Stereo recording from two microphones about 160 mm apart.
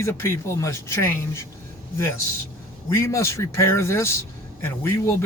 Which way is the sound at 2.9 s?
15° left (ahead or behind).